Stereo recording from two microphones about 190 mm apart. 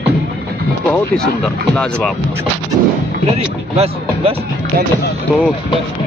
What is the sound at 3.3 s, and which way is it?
Speech, 35° right (ahead or behind).